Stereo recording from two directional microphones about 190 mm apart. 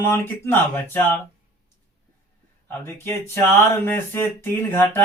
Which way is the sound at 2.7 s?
10° left (ahead or behind).